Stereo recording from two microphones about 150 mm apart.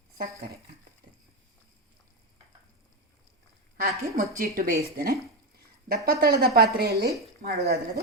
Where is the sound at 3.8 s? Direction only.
70° right (ahead or behind).